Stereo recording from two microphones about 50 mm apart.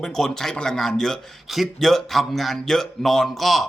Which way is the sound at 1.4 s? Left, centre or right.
Centre.